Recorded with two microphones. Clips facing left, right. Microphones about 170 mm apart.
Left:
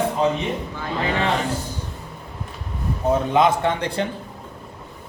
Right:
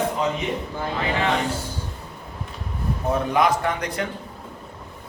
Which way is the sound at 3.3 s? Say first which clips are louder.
Left 2 dB; 25° left (ahead or behind).